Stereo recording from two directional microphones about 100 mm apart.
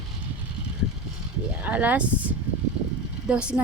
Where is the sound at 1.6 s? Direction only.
15° right (ahead or behind).